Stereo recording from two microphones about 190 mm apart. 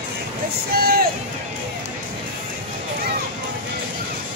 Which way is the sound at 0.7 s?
50° right (ahead or behind).